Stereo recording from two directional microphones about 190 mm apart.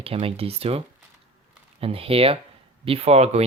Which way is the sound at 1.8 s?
30° right (ahead or behind).